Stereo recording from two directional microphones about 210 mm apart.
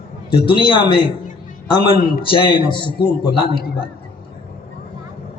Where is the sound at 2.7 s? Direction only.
20° left (ahead or behind).